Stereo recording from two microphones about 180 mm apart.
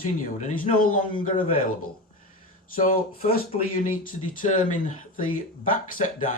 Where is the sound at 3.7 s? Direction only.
50° left (ahead or behind).